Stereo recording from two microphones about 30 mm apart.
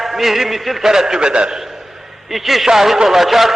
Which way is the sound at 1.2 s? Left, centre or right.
Right.